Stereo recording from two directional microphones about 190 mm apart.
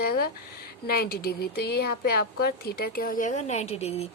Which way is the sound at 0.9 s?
55° left (ahead or behind).